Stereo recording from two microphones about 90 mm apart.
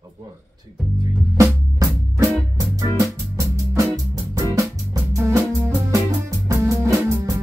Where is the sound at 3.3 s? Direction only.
35° right (ahead or behind).